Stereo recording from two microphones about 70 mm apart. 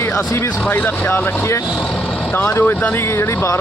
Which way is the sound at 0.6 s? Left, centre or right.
Left.